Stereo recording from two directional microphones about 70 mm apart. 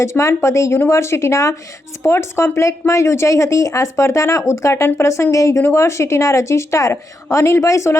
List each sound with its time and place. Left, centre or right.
0.0 s speech: left